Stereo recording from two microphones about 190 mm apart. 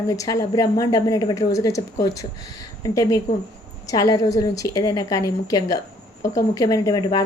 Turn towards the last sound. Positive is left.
turn(degrees=20)  # may be behind; listen again after turning